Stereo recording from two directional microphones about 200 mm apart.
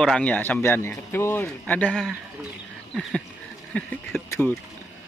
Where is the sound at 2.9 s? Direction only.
Centre (ahead or behind).